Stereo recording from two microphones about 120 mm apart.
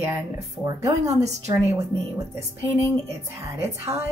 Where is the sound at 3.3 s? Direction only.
25° right (ahead or behind).